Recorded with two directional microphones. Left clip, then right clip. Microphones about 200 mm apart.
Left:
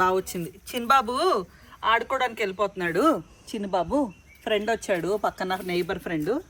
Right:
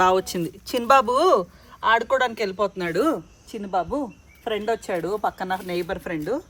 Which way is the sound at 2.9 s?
25° left (ahead or behind).